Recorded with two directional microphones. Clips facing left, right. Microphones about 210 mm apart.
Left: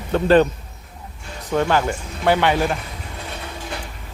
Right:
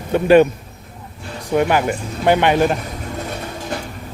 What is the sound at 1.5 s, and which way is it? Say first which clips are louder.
Speech: right 3 dB; 15° right (ahead or behind).